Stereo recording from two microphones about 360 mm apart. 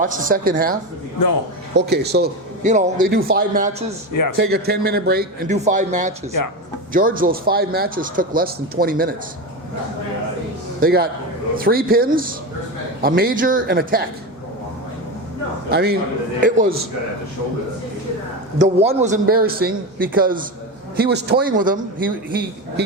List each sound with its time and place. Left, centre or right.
0.0 s a man's voice: right
10.8 s a man's voice: right
15.7 s a man's voice: right
18.6 s a man's voice: centre